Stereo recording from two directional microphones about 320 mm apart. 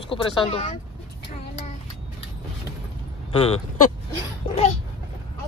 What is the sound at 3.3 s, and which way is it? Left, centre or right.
Speech, centre.